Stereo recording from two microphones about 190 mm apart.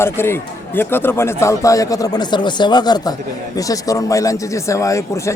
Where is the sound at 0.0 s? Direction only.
10° left (ahead or behind).